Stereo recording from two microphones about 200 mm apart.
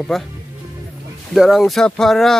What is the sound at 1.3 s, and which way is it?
Speech, centre (ahead or behind).